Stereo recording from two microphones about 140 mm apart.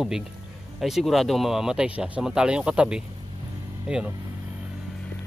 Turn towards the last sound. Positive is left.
turn(degrees=-5)  # may be behind; listen again after turning